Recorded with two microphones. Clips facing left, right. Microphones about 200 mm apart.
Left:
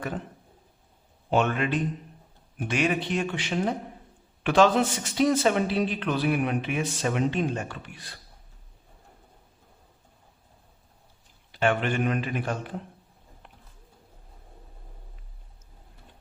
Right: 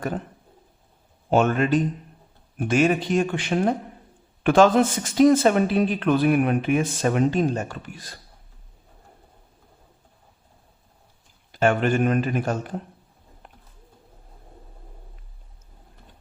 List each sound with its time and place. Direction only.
1.3 s speech: 45° right (ahead or behind)
11.5 s speech: 45° right (ahead or behind)
13.4 s a sound: 45° right (ahead or behind)